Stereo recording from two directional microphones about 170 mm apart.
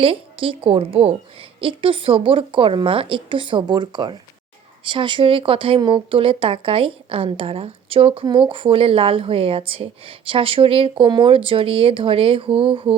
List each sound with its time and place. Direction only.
0.0 s speech: 30° right (ahead or behind)